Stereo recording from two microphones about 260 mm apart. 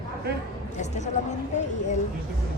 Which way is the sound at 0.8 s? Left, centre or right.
Left.